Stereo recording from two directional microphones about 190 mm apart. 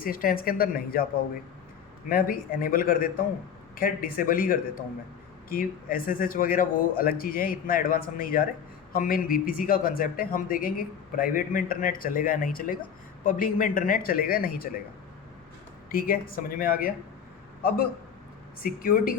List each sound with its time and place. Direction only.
0.0 s a man's voice: 50° left (ahead or behind)
2.0 s a man's voice: 50° left (ahead or behind)
15.9 s a man's voice: 50° left (ahead or behind)